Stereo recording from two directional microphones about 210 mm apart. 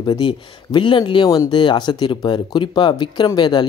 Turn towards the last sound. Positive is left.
turn(degrees=20)  # may be behind; listen again after turning